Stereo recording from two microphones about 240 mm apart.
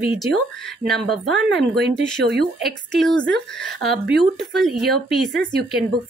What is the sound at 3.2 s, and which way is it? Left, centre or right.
Speech, right.